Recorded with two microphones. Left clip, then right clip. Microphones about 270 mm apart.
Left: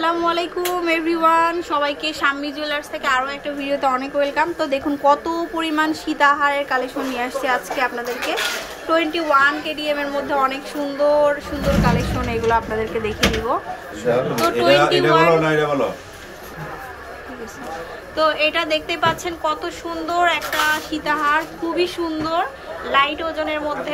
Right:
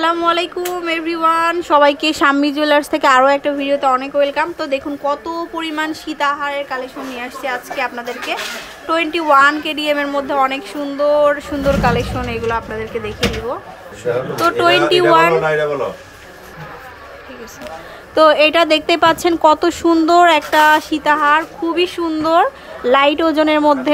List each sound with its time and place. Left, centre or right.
0.0 s a woman's voice: centre
14.6 s a woman's voice: centre
18.1 s a woman's voice: centre